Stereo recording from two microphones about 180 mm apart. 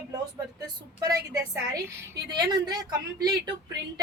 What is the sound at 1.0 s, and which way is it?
A woman's voice, 20° right (ahead or behind).